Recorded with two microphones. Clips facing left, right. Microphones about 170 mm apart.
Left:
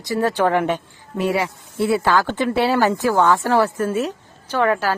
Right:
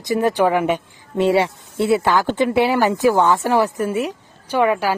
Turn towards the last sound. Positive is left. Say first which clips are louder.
# right 2 dB
turn(degrees=-10)  # may be behind; listen again after turning